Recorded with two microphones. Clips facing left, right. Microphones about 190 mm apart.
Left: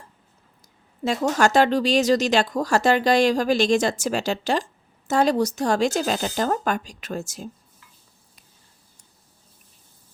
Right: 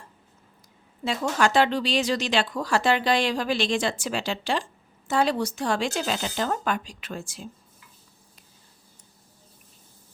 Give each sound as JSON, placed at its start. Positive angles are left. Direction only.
{"t": 1.0, "sound": "speech", "side_deg": 45}